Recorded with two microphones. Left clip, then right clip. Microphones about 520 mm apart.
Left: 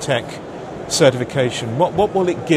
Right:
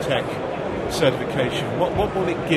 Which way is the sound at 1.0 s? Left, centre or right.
Left.